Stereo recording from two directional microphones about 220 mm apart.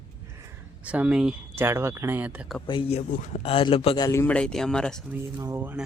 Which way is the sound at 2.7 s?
25° left (ahead or behind).